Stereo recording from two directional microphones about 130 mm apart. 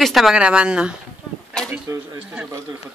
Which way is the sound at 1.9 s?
25° right (ahead or behind).